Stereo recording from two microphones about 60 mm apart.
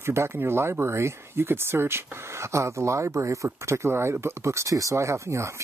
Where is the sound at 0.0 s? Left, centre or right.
Right.